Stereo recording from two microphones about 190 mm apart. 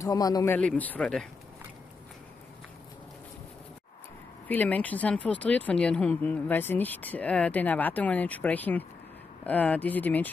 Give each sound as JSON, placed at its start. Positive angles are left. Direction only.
{"t": 0.0, "sound": "speech", "side_deg": 20}
{"t": 0.6, "sound": "speech", "side_deg": 5}
{"t": 4.5, "sound": "speech", "side_deg": 10}